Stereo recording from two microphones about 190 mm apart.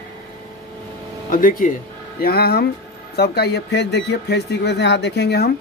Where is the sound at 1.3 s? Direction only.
45° left (ahead or behind).